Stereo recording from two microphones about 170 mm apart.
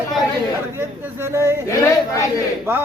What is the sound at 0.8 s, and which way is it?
Speech, 15° right (ahead or behind).